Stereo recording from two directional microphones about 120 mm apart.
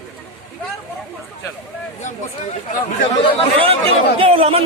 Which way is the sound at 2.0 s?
90° left.